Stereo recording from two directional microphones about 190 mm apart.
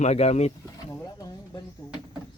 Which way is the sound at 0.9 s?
20° left (ahead or behind).